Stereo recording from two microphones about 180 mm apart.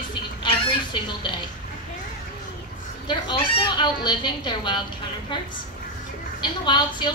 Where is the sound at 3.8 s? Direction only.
25° left (ahead or behind).